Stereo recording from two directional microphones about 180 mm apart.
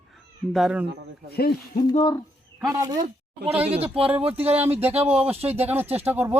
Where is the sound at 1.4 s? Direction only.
60° left (ahead or behind).